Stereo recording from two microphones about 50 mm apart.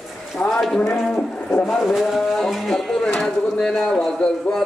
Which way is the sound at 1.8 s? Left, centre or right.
Centre.